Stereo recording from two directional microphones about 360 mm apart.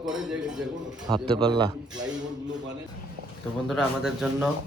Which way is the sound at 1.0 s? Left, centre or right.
Centre.